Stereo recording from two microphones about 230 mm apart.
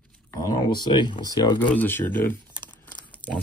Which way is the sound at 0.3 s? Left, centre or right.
Centre.